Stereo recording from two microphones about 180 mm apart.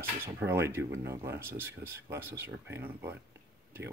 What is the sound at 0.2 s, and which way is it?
Speech, 15° right (ahead or behind).